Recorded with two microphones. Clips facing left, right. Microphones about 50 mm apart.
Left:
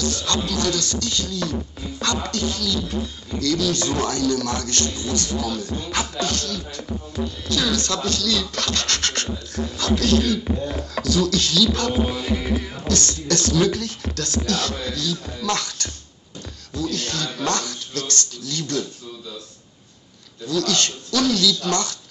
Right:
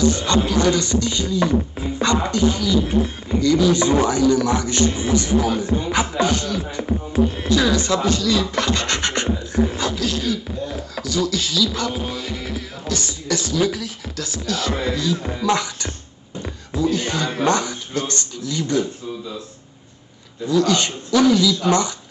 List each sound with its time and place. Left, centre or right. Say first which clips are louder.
0.0 s a man's voice: right 6 dB; centre
2.8 s speech: right 7 dB; right
3.3 s a man's voice: right 6 dB; centre
6.8 s music: right 11 dB; right
7.4 s a man's voice: right 5 dB; centre
9.9 s beatboxing: left 3 dB; centre
12.8 s speech: left 2 dB; centre
14.7 s a man's voice: right 5 dB; right
16.4 s a sound: right 6 dB; right
17.3 s speech: right 6 dB; right
20.4 s a man's voice: right 5 dB; centre